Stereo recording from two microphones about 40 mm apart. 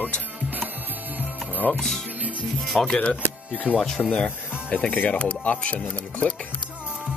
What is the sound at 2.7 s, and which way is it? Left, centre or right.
Speech, centre.